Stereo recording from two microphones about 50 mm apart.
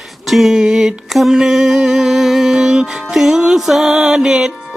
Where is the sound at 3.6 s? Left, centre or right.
Centre.